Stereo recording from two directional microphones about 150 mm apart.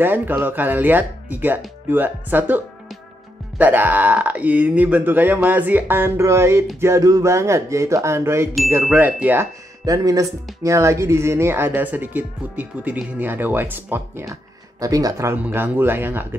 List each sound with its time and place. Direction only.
0.0 s speech: 15° right (ahead or behind)
9.8 s speech: 25° right (ahead or behind)